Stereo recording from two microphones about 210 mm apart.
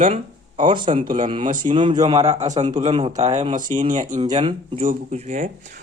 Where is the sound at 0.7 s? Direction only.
25° right (ahead or behind).